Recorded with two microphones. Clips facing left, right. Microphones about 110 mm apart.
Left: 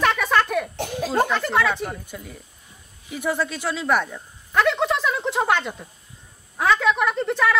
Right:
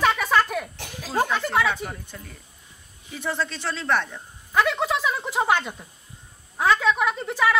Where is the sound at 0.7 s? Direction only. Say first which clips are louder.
Left 11 dB; 50° left (ahead or behind).